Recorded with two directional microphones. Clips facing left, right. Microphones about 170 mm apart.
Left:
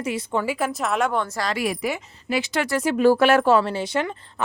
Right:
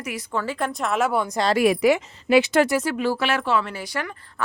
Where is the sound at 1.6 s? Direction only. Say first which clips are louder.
Right 8 dB; 85° right.